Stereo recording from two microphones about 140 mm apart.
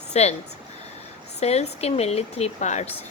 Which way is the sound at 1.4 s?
50° left (ahead or behind).